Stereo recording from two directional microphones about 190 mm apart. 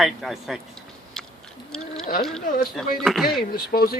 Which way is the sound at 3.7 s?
50° left (ahead or behind).